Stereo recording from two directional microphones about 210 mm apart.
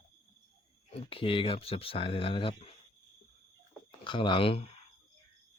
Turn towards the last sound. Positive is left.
turn(degrees=25)  # may be behind; listen again after turning